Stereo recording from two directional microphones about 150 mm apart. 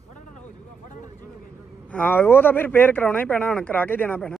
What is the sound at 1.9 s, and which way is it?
Speech, 10° left (ahead or behind).